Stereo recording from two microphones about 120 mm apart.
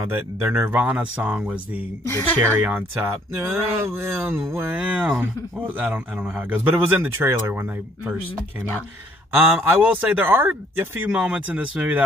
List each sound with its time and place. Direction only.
0.0 s speech: 20° right (ahead or behind)
9.3 s speech: 15° right (ahead or behind)